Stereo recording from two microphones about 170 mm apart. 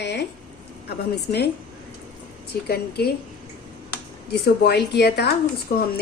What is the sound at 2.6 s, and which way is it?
Speech, 70° left (ahead or behind).